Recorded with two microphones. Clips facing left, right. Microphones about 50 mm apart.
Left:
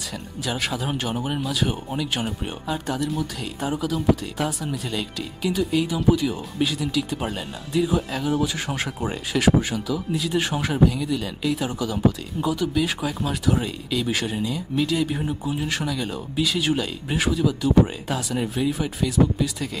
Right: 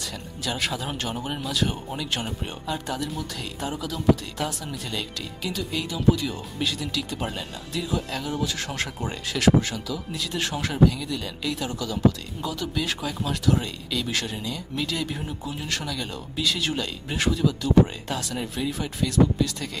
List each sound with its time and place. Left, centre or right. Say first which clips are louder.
0.5 s speech: left 2 dB; centre
11.6 s speech: right 1 dB; centre